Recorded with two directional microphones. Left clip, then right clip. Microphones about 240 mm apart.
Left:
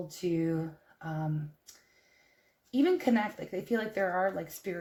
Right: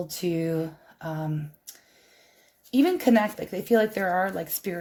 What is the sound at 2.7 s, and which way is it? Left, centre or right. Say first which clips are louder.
Speech: right 6 dB; right.